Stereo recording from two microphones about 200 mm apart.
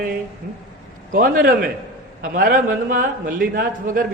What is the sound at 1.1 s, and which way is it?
A man's voice, 45° right (ahead or behind).